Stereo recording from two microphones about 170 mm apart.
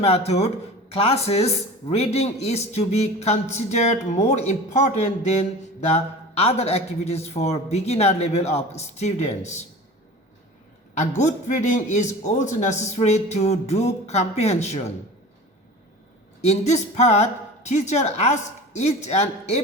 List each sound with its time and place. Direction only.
0.0 s a man's voice: 35° left (ahead or behind)
10.9 s a man's voice: 45° left (ahead or behind)
16.4 s a man's voice: 40° left (ahead or behind)